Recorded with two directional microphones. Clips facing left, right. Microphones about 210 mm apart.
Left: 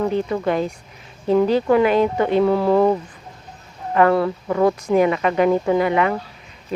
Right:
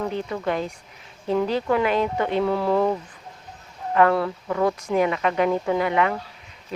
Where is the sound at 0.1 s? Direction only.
40° left (ahead or behind).